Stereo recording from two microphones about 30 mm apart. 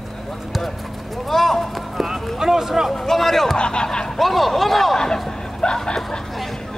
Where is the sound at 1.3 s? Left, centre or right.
Centre.